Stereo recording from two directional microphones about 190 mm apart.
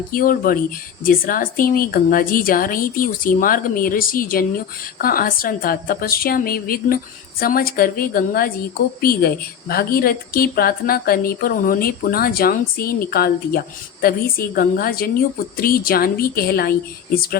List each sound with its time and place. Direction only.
0.1 s a woman's voice: 50° left (ahead or behind)